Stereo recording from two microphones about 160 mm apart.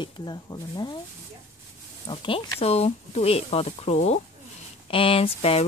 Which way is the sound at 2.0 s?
35° left (ahead or behind).